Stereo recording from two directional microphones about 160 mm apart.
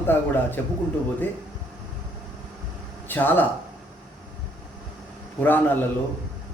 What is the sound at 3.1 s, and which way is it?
Speech, 10° left (ahead or behind).